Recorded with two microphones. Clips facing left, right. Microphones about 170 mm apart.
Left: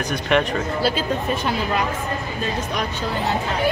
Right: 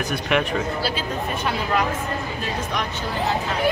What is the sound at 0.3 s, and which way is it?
Speech, 5° right (ahead or behind).